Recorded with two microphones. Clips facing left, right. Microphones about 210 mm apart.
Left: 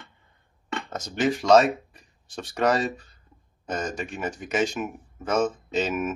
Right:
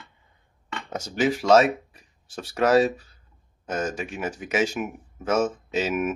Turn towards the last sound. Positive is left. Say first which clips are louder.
# right 1 dB
turn(degrees=-10)  # may be behind; listen again after turning